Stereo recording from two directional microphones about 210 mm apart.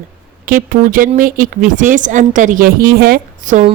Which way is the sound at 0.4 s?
40° right (ahead or behind).